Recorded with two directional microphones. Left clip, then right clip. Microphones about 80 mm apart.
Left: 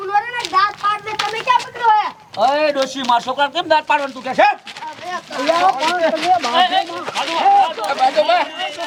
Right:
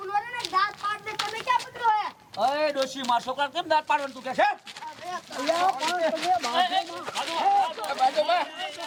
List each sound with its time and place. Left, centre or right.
0.1 s children playing: right
5.1 s speech: right